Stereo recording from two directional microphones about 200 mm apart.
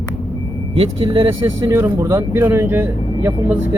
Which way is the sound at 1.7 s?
10° right (ahead or behind).